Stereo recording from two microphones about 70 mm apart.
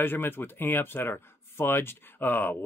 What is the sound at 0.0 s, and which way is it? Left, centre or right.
Speech, left.